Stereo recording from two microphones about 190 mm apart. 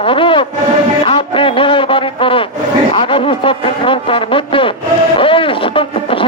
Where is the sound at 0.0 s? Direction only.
25° left (ahead or behind).